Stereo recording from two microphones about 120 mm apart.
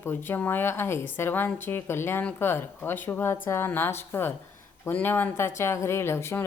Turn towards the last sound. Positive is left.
turn(degrees=20)  # may be behind; listen again after turning